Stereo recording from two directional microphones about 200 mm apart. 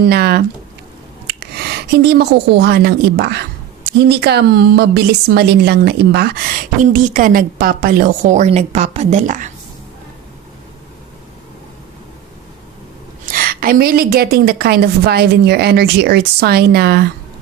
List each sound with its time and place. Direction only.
0.1 s a woman's voice: 50° right (ahead or behind)
6.8 s a woman's voice: 40° right (ahead or behind)
13.2 s a woman's voice: 45° right (ahead or behind)